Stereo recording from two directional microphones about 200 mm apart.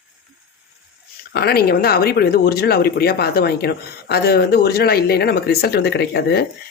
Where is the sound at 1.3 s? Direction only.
50° left (ahead or behind).